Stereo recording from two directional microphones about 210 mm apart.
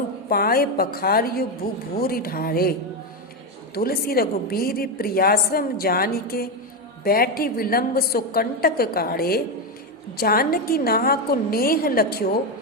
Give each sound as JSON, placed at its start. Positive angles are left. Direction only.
{"t": 0.3, "sound": "a woman's voice", "side_deg": 45}
{"t": 3.8, "sound": "a woman's voice", "side_deg": 45}